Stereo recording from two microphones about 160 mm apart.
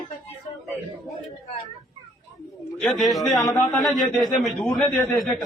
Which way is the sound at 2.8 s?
Centre (ahead or behind).